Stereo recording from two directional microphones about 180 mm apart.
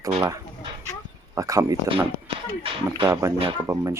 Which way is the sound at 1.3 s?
20° right (ahead or behind).